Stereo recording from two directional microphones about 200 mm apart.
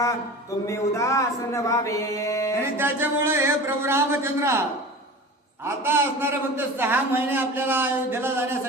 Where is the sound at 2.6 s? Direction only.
10° right (ahead or behind).